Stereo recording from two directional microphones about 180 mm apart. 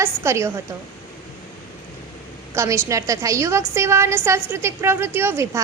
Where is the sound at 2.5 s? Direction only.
15° right (ahead or behind).